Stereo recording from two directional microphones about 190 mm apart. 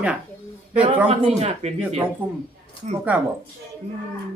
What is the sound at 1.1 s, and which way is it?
Speech, 35° right (ahead or behind).